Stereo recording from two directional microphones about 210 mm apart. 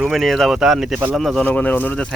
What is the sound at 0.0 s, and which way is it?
Speech, centre (ahead or behind).